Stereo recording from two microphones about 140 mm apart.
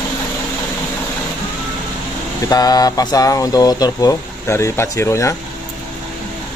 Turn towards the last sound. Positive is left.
turn(degrees=20)  # may be behind; listen again after turning